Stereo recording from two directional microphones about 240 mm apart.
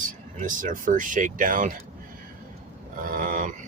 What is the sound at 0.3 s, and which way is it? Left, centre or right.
Speech, right.